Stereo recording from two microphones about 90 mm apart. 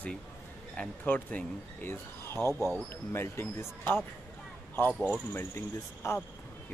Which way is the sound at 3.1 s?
25° left (ahead or behind).